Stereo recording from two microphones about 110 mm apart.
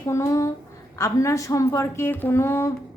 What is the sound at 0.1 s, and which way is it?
A woman's voice, 30° left (ahead or behind).